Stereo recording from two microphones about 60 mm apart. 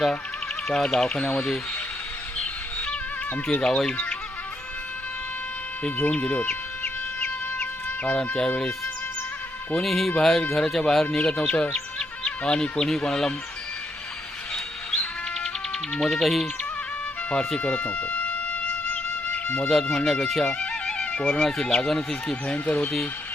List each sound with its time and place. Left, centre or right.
0.7 s speech: centre
2.4 s music: centre
3.5 s speech: centre
6.1 s chicken: left
9.7 s speech: centre
14.5 s music: centre
16.0 s speech: centre
17.6 s music: left
19.9 s speech: centre
21.0 s speech: left
22.5 s speech: left